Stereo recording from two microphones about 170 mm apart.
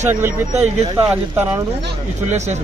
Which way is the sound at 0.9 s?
10° right (ahead or behind).